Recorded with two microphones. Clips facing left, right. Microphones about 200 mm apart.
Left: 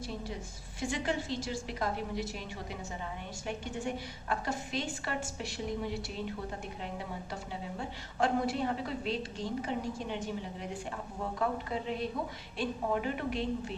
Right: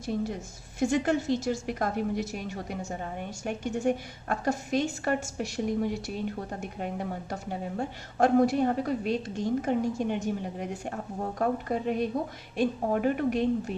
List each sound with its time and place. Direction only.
0.0 s a woman's voice: 50° right (ahead or behind)